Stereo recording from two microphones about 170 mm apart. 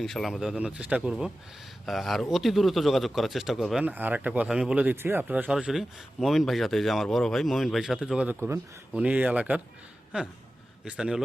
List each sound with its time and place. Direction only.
0.0 s speech: centre (ahead or behind)
10.8 s speech: 5° right (ahead or behind)